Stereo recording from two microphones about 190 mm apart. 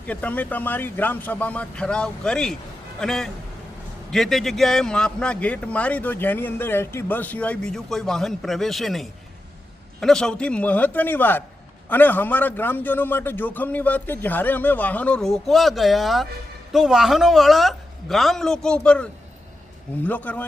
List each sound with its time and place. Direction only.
0.0 s a man's voice: 10° left (ahead or behind)
20.1 s a man's voice: 10° left (ahead or behind)